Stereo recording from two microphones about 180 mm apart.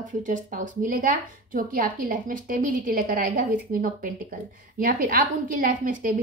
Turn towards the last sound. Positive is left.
turn(degrees=-50)  # may be behind; listen again after turning